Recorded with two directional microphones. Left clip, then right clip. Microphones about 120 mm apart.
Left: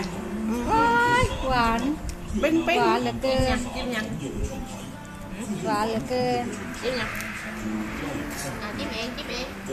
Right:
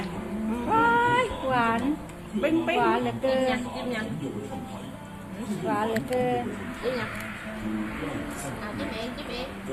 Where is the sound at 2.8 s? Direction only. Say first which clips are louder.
Left 2 dB; 5° left (ahead or behind).